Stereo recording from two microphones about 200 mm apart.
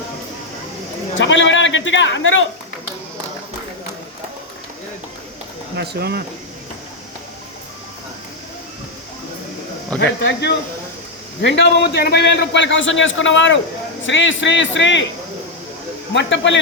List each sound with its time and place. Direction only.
1.2 s speech: 70° left (ahead or behind)
5.7 s speech: 55° right (ahead or behind)
10.2 s a man's voice: 60° left (ahead or behind)
16.1 s a man's voice: 65° left (ahead or behind)